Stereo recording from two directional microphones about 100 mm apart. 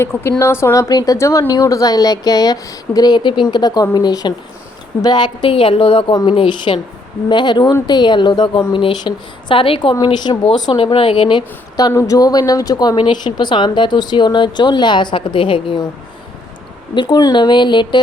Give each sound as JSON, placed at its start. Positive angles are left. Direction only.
{"t": 0.0, "sound": "a woman's voice", "side_deg": 25}
{"t": 5.5, "sound": "a woman's voice", "side_deg": 60}
{"t": 9.9, "sound": "a woman's voice", "side_deg": 45}
{"t": 11.8, "sound": "a woman's voice", "side_deg": 35}
{"t": 16.9, "sound": "a woman's voice", "side_deg": 45}